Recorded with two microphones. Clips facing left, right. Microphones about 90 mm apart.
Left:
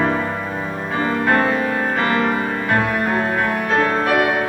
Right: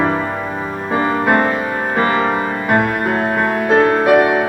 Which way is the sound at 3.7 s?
10° right (ahead or behind).